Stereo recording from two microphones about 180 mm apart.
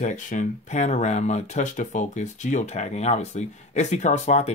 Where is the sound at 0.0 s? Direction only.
45° left (ahead or behind).